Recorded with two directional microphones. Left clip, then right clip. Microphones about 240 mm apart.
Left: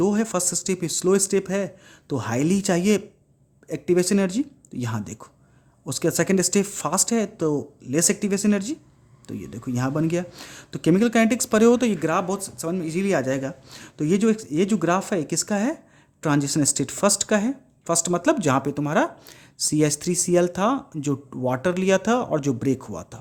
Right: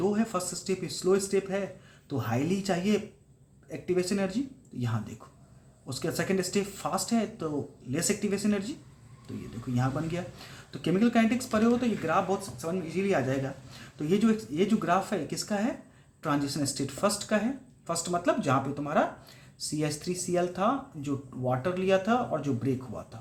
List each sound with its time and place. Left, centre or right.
0.0 s speech: left
9.7 s speech: left